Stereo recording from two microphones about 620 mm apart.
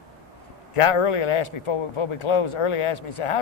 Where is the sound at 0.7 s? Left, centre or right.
Left.